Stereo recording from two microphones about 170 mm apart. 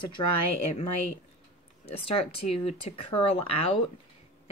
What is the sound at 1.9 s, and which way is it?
Speech, 35° left (ahead or behind).